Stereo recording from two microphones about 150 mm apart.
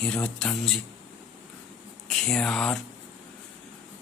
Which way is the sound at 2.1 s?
5° left (ahead or behind).